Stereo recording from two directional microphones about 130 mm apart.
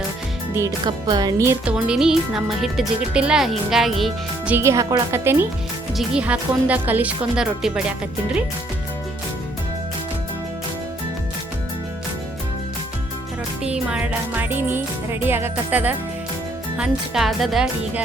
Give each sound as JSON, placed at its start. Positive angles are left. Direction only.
{"t": 0.9, "sound": "speech", "side_deg": -35}
{"t": 1.6, "sound": "speech", "side_deg": -5}
{"t": 4.5, "sound": "speech", "side_deg": -25}
{"t": 13.7, "sound": "speech", "side_deg": -10}